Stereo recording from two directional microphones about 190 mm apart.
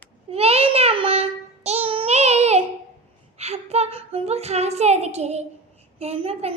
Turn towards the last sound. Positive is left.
turn(degrees=-30)  # may be behind; listen again after turning